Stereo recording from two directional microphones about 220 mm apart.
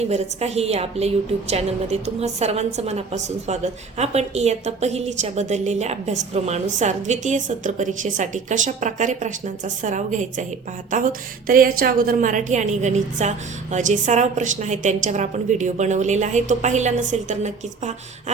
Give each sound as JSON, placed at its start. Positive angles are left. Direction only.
{"t": 0.1, "sound": "a woman's voice", "side_deg": -30}
{"t": 11.4, "sound": "a woman's voice", "side_deg": -40}